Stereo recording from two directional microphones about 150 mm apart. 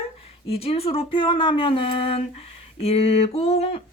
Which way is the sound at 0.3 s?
40° left (ahead or behind).